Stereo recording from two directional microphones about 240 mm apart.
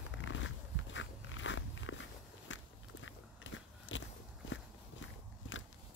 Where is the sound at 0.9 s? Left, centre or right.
Left.